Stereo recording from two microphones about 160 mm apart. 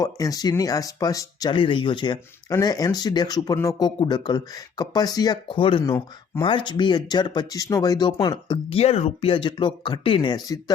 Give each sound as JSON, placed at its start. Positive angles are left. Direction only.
{"t": 0.0, "sound": "speech", "side_deg": 20}
{"t": 8.8, "sound": "speech", "side_deg": 40}